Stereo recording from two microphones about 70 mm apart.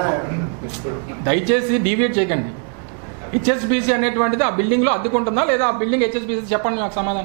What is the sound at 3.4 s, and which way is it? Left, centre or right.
A man's voice, centre.